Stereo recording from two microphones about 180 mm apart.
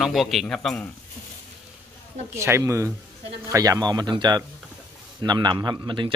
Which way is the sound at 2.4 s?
15° right (ahead or behind).